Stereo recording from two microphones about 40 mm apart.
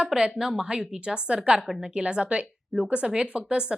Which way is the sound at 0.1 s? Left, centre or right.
Centre.